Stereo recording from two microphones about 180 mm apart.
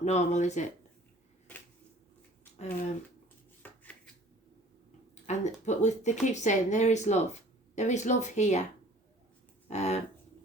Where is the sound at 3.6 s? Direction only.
10° left (ahead or behind).